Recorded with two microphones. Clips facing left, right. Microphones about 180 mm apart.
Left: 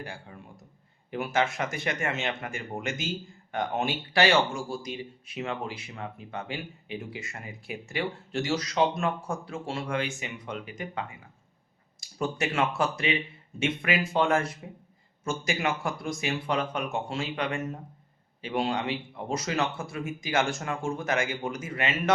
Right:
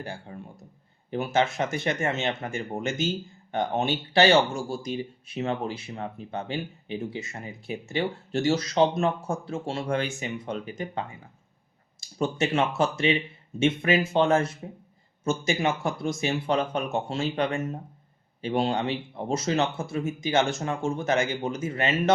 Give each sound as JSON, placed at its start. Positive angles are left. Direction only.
{"t": 0.0, "sound": "speech", "side_deg": -25}
{"t": 2.0, "sound": "speech", "side_deg": -40}
{"t": 2.5, "sound": "speech", "side_deg": -25}
{"t": 12.2, "sound": "speech", "side_deg": -25}